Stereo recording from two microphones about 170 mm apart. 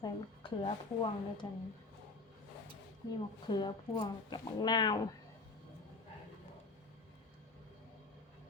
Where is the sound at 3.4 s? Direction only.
25° left (ahead or behind).